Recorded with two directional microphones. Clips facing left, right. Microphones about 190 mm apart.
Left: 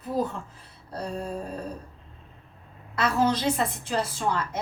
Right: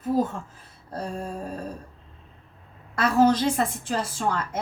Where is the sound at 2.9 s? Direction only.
50° right (ahead or behind).